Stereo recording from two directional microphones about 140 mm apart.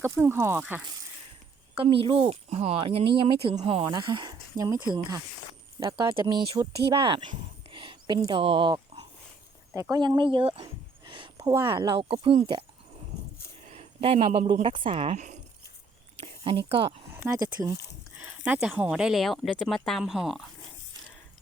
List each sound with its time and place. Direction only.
0.0 s speech: 15° right (ahead or behind)
1.8 s speech: 40° right (ahead or behind)
3.8 s speech: 30° right (ahead or behind)
7.7 s a sound: 35° right (ahead or behind)
8.3 s speech: 40° right (ahead or behind)
9.9 s a sound: 30° right (ahead or behind)
11.7 s speech: 35° right (ahead or behind)
13.7 s speech: 45° right (ahead or behind)
16.2 s speech: 45° right (ahead or behind)
17.4 s speech: 25° right (ahead or behind)
18.2 s a sound: 10° right (ahead or behind)
18.6 s speech: 5° right (ahead or behind)